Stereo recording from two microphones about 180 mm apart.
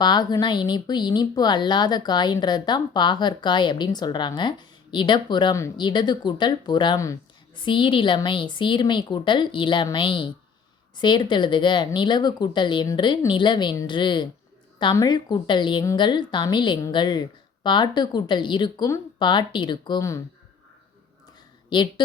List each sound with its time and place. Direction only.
0.0 s speech: 25° left (ahead or behind)
21.7 s speech: 25° left (ahead or behind)